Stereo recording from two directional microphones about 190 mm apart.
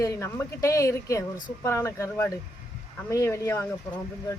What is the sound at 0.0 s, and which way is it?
Speech, 15° left (ahead or behind).